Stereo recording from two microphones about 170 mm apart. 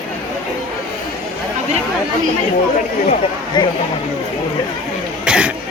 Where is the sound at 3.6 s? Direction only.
25° left (ahead or behind).